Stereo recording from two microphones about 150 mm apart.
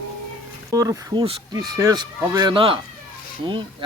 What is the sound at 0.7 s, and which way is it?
Speech, 20° right (ahead or behind).